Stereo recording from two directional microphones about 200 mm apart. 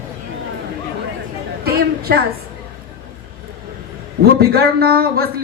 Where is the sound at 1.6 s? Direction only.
50° right (ahead or behind).